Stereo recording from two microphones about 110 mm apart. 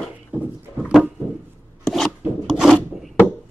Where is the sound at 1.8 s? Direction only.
5° left (ahead or behind).